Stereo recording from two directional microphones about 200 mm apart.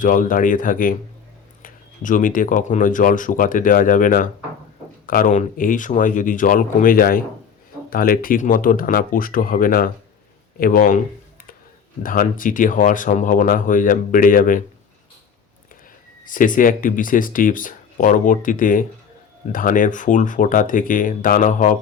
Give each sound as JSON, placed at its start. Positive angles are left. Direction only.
{"t": 0.0, "sound": "speech", "side_deg": 40}
{"t": 12.0, "sound": "speech", "side_deg": 45}
{"t": 16.2, "sound": "speech", "side_deg": 40}